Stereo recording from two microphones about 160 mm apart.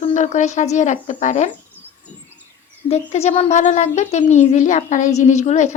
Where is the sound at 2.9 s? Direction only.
40° left (ahead or behind).